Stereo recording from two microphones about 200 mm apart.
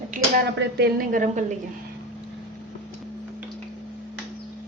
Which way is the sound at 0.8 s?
45° right (ahead or behind).